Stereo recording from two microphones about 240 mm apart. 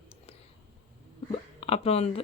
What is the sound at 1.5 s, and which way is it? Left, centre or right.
Speech, left.